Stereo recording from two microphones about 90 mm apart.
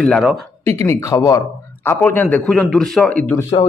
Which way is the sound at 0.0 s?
5° left (ahead or behind).